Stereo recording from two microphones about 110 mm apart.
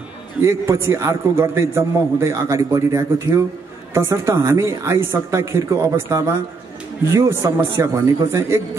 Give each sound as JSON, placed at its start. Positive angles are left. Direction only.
{"t": 0.4, "sound": "a man's voice", "side_deg": -25}